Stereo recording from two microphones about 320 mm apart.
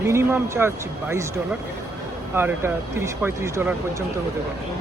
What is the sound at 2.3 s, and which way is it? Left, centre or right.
Speech, centre.